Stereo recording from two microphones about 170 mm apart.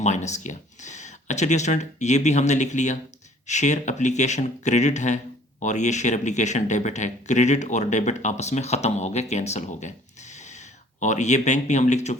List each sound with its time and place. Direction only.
0.0 s speech: 45° left (ahead or behind)